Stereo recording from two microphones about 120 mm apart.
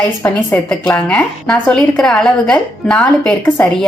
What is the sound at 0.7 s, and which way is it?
A woman's voice, 10° left (ahead or behind).